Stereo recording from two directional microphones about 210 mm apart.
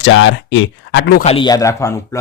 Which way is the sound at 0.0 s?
60° left (ahead or behind).